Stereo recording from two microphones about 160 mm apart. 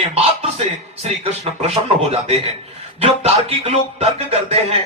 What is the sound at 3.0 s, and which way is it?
Music, 40° right (ahead or behind).